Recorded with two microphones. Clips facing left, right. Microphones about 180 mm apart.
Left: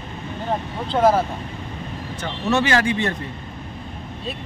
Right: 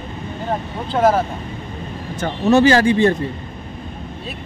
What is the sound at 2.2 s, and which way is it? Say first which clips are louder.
Speech: right 8 dB; 40° right (ahead or behind).